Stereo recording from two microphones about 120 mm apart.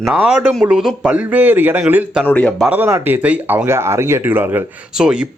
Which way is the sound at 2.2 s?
15° left (ahead or behind).